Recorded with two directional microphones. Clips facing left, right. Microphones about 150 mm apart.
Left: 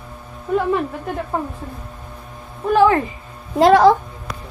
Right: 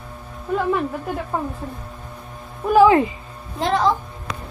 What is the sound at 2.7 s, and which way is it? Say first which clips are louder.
Speech: right 1 dB; 15° right (ahead or behind).